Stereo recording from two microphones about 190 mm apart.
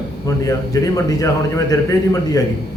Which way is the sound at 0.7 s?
20° left (ahead or behind).